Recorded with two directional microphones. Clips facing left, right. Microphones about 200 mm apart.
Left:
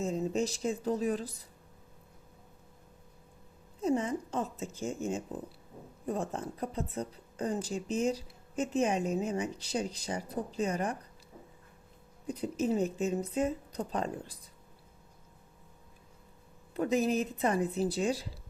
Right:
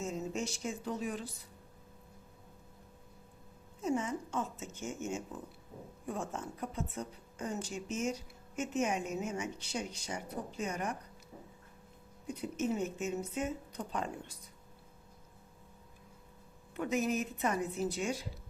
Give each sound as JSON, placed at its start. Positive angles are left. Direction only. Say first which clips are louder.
{"t": 0.0, "sound": "speech", "louder": "left 6 dB", "side_deg": 35}
{"t": 3.8, "sound": "a woman's voice", "louder": "left 4 dB", "side_deg": 35}
{"t": 12.3, "sound": "a woman's voice", "louder": "left 4 dB", "side_deg": 35}
{"t": 16.7, "sound": "a woman's voice", "louder": "left 4 dB", "side_deg": 35}